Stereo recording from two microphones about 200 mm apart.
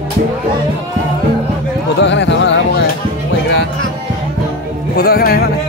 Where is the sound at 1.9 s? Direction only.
65° left (ahead or behind).